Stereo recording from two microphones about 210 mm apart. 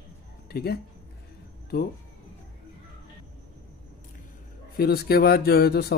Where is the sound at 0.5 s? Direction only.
50° left (ahead or behind).